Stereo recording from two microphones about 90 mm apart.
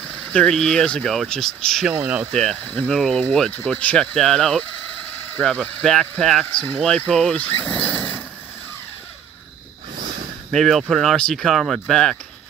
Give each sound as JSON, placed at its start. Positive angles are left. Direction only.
{"t": 0.1, "sound": "speech", "side_deg": 15}
{"t": 2.6, "sound": "speech", "side_deg": 20}
{"t": 2.9, "sound": "speech", "side_deg": 5}
{"t": 6.5, "sound": "speech", "side_deg": 15}
{"t": 7.7, "sound": "a sound", "side_deg": 15}
{"t": 10.5, "sound": "speech", "side_deg": 0}